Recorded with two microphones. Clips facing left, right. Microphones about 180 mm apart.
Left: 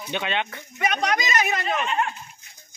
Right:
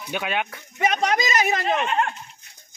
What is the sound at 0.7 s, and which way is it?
Speech, 25° right (ahead or behind).